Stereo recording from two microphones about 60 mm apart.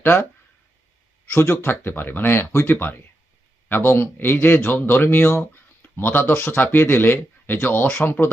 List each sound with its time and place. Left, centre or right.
1.4 s speech: left
2.7 s speech: left
5.8 s speech: left